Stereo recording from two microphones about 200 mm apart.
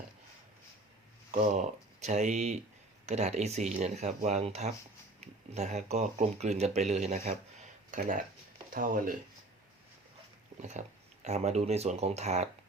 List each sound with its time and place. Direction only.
1.3 s speech: 35° right (ahead or behind)
10.6 s speech: 35° right (ahead or behind)